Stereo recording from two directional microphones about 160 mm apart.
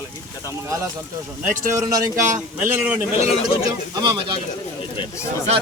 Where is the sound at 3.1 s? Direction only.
40° left (ahead or behind).